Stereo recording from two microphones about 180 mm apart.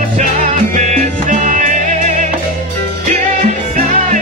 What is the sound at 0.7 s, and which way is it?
Music, 45° right (ahead or behind).